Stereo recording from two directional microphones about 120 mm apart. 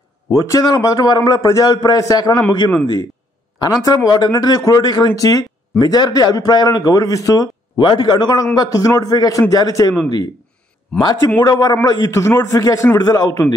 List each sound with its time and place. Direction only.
0.3 s speech: 25° left (ahead or behind)
3.5 s a man's voice: 30° left (ahead or behind)
11.0 s a man's voice: 35° left (ahead or behind)